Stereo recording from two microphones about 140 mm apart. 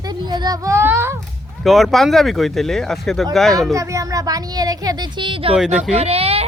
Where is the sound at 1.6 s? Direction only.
Centre (ahead or behind).